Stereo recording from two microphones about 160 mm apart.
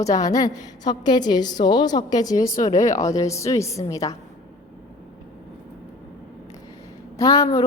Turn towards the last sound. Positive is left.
turn(degrees=20)  # may be behind; listen again after turning